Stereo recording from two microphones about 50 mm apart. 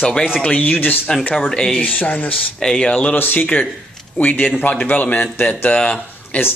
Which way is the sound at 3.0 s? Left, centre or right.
Left.